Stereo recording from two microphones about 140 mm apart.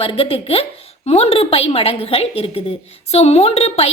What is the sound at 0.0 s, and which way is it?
Speech, 40° left (ahead or behind).